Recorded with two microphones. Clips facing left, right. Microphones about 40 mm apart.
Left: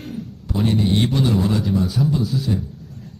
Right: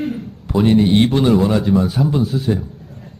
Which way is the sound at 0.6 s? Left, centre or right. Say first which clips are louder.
Right 6 dB; right.